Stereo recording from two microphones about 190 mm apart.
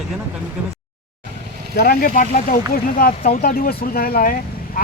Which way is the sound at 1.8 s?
50° left (ahead or behind).